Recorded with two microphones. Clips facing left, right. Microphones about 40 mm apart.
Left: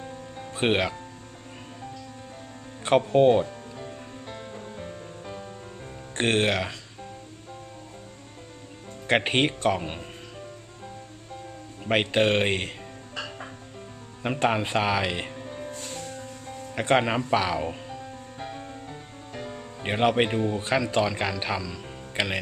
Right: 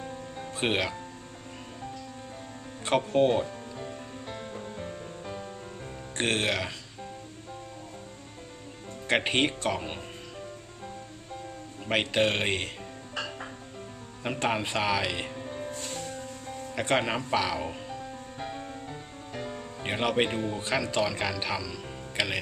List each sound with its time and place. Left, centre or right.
0.0 s music: centre
0.5 s speech: left
3.1 s music: centre
6.1 s speech: left
9.0 s speech: left
11.9 s speech: left
13.1 s music: centre
14.4 s speech: left
15.4 s music: centre
16.9 s speech: centre
17.6 s music: centre
19.9 s speech: centre
20.2 s speech: centre
21.7 s music: centre